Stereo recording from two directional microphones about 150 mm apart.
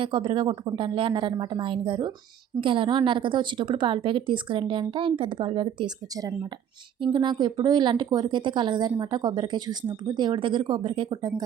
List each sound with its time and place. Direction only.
0.0 s speech: 35° right (ahead or behind)